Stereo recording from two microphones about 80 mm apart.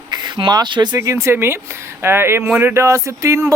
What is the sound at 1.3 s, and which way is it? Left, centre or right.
Speech, right.